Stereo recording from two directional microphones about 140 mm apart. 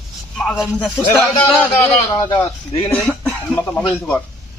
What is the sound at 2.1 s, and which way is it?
Speech, 25° left (ahead or behind).